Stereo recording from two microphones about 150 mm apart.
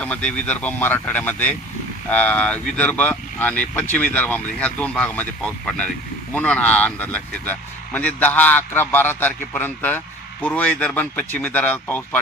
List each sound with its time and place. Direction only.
0.0 s a man's voice: 10° left (ahead or behind)